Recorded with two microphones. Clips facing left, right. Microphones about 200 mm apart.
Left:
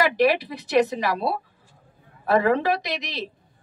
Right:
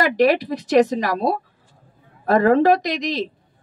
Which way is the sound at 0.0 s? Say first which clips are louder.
Right 3 dB; 45° right (ahead or behind).